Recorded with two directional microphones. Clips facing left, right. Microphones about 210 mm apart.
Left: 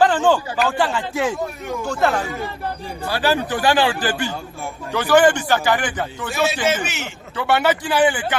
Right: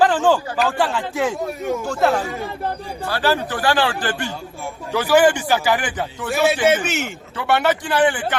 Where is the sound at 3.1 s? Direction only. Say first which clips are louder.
Left 1 dB; 15° left (ahead or behind).